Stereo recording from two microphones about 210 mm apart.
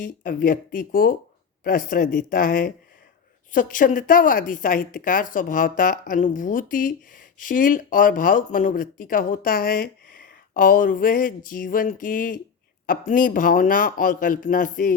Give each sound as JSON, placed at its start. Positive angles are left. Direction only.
{"t": 0.0, "sound": "speech", "side_deg": 40}